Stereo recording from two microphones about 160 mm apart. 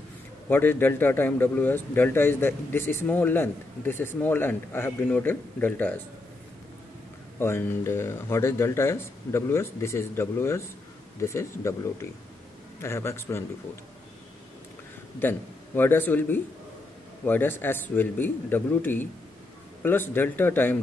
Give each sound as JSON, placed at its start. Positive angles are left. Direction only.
{"t": 0.5, "sound": "a man's voice", "side_deg": 10}
{"t": 7.3, "sound": "a man's voice", "side_deg": 15}
{"t": 15.1, "sound": "a man's voice", "side_deg": 10}